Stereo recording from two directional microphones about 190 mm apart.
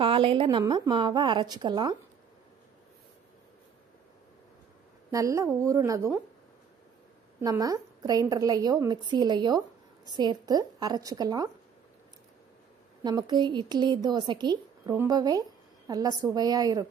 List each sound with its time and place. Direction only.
0.0 s a woman's voice: 30° right (ahead or behind)
5.1 s a woman's voice: 15° right (ahead or behind)
7.4 s a woman's voice: 20° right (ahead or behind)
13.0 s a woman's voice: 20° right (ahead or behind)